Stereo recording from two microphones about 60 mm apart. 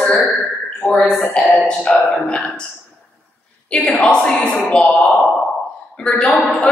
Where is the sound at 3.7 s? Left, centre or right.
Centre.